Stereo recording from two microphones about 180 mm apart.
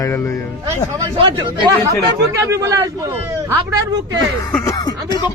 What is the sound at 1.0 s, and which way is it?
Speech, 25° right (ahead or behind).